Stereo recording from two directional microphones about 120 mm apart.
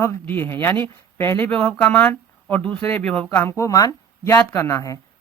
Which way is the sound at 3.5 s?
25° left (ahead or behind).